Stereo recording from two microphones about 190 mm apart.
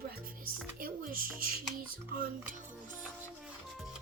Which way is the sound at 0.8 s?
50° right (ahead or behind).